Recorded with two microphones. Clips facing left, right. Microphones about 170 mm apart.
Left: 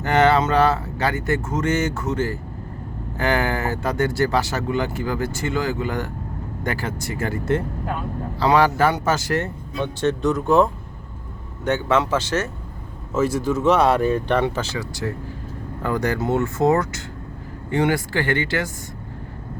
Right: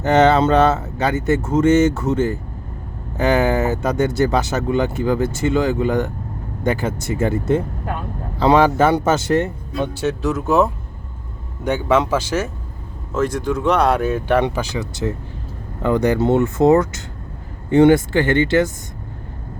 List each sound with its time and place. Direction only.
0.0 s speech: 20° right (ahead or behind)
10.0 s speech: 5° right (ahead or behind)
13.1 s speech: 5° left (ahead or behind)
14.4 s speech: 15° right (ahead or behind)